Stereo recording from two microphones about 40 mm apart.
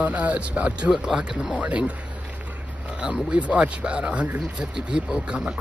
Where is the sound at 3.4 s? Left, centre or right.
Right.